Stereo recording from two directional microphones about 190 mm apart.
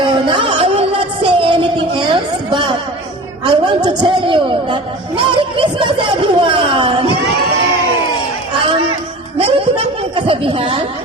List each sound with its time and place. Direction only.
0.0 s music: 25° right (ahead or behind)
3.4 s a man's voice: 25° right (ahead or behind)
9.4 s a sound: 30° right (ahead or behind)